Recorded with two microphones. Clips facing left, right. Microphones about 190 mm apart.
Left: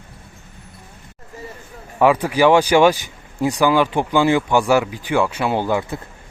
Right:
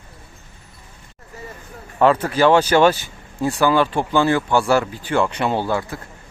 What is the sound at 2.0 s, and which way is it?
Speech, 10° left (ahead or behind).